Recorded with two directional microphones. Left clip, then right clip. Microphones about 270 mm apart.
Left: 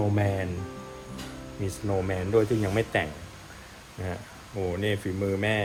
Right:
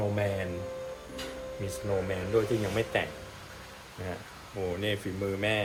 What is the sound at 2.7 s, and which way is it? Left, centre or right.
Speech, left.